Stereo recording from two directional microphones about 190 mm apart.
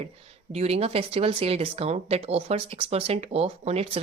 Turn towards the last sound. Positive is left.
turn(degrees=-30)  # may be behind; listen again after turning